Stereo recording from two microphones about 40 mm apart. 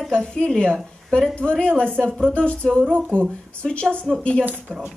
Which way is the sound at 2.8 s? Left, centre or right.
Right.